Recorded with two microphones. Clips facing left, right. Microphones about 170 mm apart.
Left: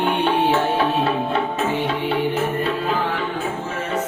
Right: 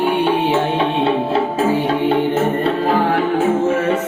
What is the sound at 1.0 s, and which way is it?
Music, 30° right (ahead or behind).